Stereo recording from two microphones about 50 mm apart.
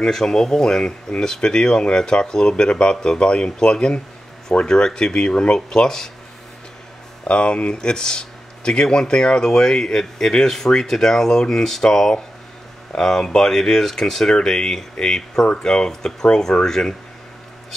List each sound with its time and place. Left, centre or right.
0.0 s speech: centre
7.2 s speech: left